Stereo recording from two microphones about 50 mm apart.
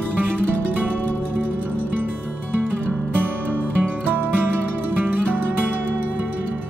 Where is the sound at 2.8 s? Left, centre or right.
Right.